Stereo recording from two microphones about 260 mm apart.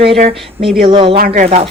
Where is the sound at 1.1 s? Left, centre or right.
Right.